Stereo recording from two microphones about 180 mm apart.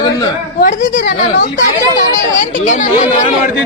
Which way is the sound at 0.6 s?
55° left (ahead or behind).